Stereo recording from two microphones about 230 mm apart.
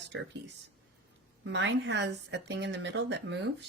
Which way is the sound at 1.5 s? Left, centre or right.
Right.